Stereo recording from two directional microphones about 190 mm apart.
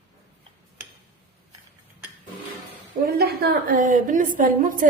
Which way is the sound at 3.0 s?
55° right (ahead or behind).